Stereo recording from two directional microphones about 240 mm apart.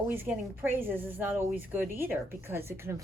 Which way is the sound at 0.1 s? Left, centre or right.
Centre.